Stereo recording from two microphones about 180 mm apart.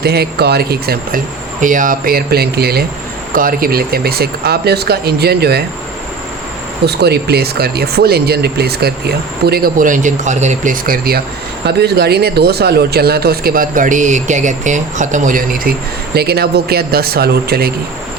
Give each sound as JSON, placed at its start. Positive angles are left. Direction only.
{"t": 0.0, "sound": "speech", "side_deg": -60}
{"t": 1.6, "sound": "speech", "side_deg": -45}
{"t": 6.8, "sound": "speech", "side_deg": -65}
{"t": 16.1, "sound": "speech", "side_deg": -60}